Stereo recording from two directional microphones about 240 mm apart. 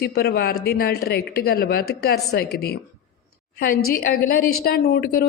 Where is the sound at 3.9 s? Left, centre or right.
Left.